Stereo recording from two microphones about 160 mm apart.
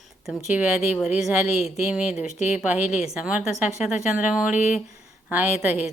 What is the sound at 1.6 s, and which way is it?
Speech, 40° left (ahead or behind).